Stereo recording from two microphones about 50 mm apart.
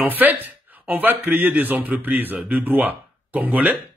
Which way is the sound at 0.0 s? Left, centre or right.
Right.